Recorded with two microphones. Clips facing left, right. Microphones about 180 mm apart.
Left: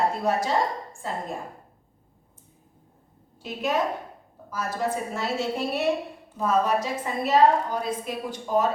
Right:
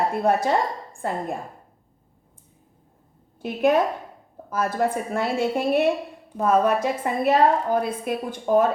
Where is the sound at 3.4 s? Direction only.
55° right (ahead or behind).